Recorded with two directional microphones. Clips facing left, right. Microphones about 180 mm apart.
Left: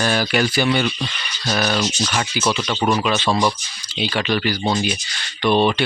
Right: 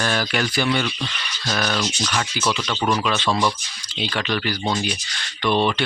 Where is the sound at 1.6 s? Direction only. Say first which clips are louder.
Left 3 dB; 20° left (ahead or behind).